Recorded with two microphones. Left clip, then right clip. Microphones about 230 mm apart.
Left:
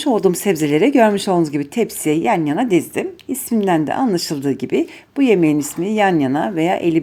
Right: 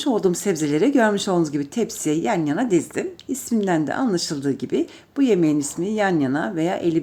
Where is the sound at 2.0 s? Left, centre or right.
Centre.